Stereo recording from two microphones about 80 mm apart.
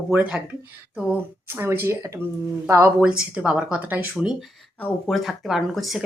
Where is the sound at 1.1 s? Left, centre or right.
Right.